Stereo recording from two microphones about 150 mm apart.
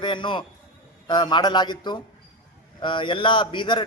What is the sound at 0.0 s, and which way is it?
A man's voice, 30° left (ahead or behind).